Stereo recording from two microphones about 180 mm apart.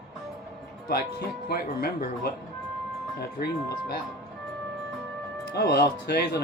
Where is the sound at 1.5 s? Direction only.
60° left (ahead or behind).